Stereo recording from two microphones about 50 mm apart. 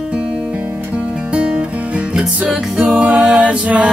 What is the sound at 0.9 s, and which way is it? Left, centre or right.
Music, right.